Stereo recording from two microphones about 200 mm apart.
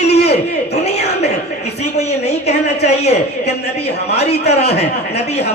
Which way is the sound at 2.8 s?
30° left (ahead or behind).